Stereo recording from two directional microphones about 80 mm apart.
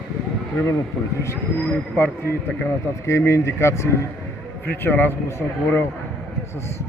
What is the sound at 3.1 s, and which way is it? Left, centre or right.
Speech, left.